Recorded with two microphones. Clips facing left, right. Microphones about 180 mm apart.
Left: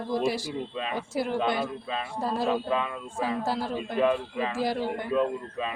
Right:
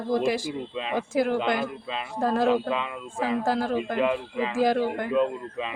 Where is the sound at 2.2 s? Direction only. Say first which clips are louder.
Right 6 dB; 50° right (ahead or behind).